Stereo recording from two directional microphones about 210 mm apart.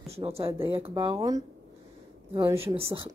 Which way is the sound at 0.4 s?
10° right (ahead or behind).